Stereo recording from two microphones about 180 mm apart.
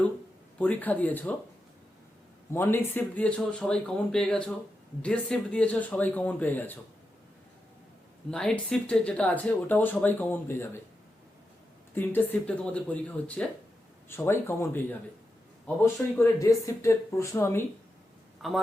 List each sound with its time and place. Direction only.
0.6 s speech: 10° left (ahead or behind)
2.5 s speech: 15° left (ahead or behind)
8.3 s speech: 5° left (ahead or behind)
11.9 s speech: 10° left (ahead or behind)
18.4 s a woman's voice: centre (ahead or behind)